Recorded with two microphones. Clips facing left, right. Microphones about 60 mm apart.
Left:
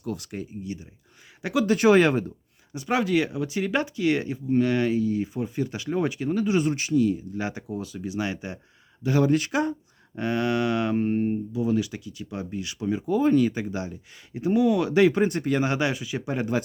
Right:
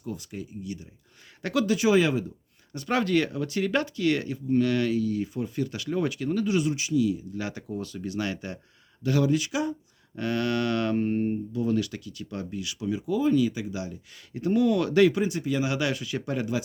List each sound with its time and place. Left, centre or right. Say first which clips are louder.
0.0 s speech: left 4 dB; left
0.6 s speech: left 2 dB; left
1.4 s speech: left 1 dB; centre
1.6 s speech: left 4 dB; left
2.7 s speech: left 1 dB; centre
6.6 s speech: left 2 dB; left
7.3 s speech: left 2 dB; left
9.2 s speech: left 3 dB; left
10.2 s speech: left 2 dB; left
12.5 s speech: left 3 dB; left
15.1 s speech: left 4 dB; left
15.8 s speech: left 2 dB; centre